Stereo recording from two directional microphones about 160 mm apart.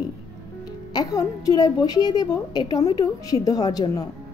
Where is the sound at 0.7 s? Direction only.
25° left (ahead or behind).